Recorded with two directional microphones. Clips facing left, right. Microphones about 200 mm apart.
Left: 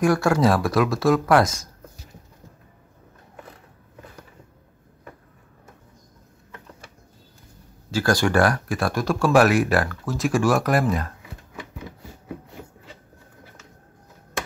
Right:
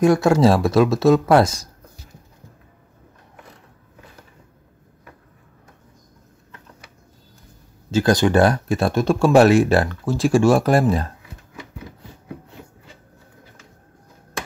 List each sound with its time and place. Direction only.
0.0 s speech: 20° right (ahead or behind)
7.9 s speech: 20° right (ahead or behind)
11.5 s rub: 10° left (ahead or behind)